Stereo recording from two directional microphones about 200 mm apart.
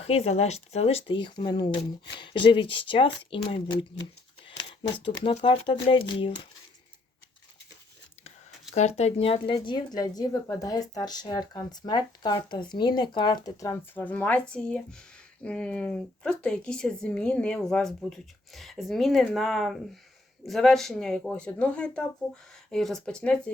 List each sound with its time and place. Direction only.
0.0 s speech: 30° left (ahead or behind)
8.7 s a woman's voice: 35° left (ahead or behind); by 23.4 s 5° left (ahead or behind)